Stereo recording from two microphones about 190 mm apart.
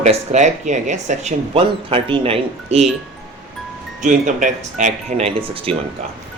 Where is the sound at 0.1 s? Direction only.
35° right (ahead or behind).